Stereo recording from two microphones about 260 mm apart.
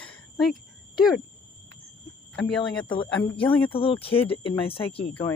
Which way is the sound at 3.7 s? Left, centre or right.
Left.